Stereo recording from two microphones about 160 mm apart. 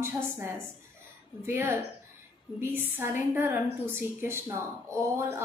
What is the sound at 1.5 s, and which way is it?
A woman's voice, 15° right (ahead or behind).